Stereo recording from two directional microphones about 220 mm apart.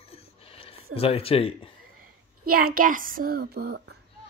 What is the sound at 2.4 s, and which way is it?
A child's voice, 40° right (ahead or behind).